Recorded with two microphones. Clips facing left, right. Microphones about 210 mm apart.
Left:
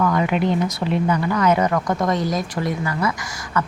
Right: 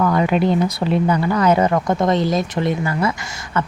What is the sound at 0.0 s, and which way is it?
Speech, 35° right (ahead or behind).